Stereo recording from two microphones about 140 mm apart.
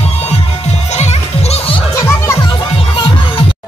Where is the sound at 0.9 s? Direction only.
55° left (ahead or behind).